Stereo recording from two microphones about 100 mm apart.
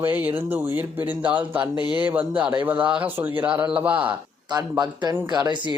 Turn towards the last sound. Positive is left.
turn(degrees=-50)  # may be behind; listen again after turning